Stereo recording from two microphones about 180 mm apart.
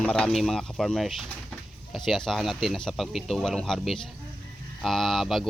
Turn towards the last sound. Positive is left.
turn(degrees=0)  # may be behind; listen again after turning